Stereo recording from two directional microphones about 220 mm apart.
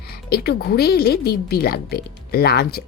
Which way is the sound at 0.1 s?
45° left (ahead or behind).